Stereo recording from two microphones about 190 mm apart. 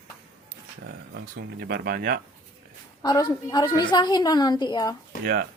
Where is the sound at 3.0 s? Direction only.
20° left (ahead or behind).